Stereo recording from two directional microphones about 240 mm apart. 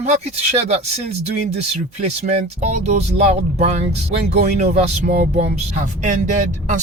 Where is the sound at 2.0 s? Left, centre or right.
Right.